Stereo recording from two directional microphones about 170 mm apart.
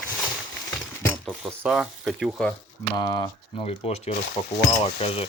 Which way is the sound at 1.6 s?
Centre (ahead or behind).